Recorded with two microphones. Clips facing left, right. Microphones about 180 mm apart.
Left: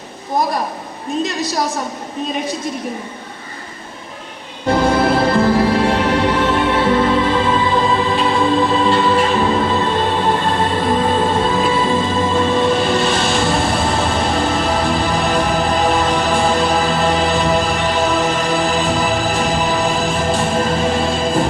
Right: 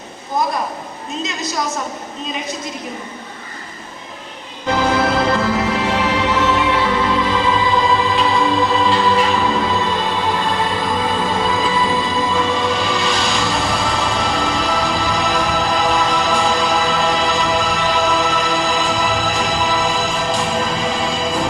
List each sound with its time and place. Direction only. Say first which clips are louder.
1.4 s a woman's voice: left 3 dB; 30° left (ahead or behind)
5.1 s music: left 3 dB; 30° left (ahead or behind)
5.8 s music: left 3 dB; 55° left (ahead or behind)